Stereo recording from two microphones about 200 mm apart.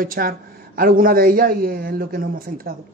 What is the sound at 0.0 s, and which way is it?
Speech, 45° right (ahead or behind).